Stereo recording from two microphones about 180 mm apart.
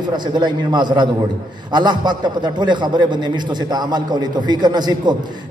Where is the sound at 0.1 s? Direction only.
25° right (ahead or behind).